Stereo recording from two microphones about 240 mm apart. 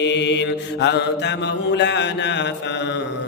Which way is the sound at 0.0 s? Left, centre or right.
Left.